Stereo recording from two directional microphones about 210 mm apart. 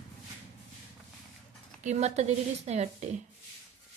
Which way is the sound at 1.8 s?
30° right (ahead or behind).